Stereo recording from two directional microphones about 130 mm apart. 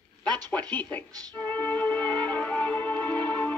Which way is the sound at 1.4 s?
10° left (ahead or behind).